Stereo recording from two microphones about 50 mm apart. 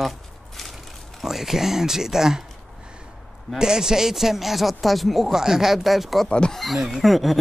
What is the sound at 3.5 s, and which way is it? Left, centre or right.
Speech, centre.